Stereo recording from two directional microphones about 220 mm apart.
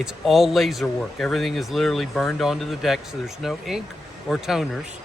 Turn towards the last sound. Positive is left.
turn(degrees=0)  # may be behind; listen again after turning